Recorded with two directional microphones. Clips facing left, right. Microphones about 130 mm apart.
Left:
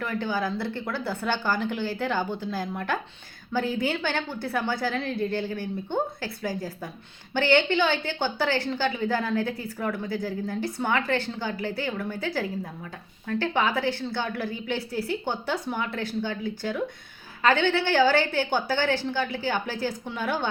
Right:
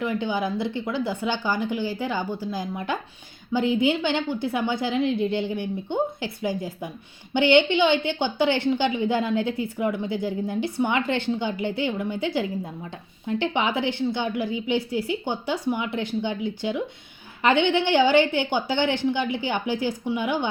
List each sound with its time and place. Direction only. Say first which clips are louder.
0.0 s a woman's voice: right 3 dB; 20° right (ahead or behind)